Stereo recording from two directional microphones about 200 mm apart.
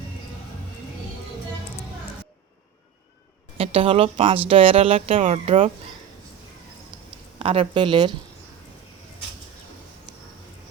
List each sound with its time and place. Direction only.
3.6 s speech: 30° right (ahead or behind)
7.3 s speech: 25° right (ahead or behind)